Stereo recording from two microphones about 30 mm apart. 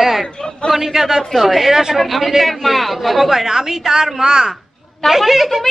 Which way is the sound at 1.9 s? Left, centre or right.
Centre.